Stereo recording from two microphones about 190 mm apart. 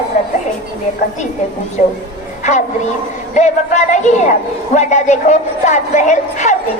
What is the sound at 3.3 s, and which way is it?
A woman's voice, 40° left (ahead or behind).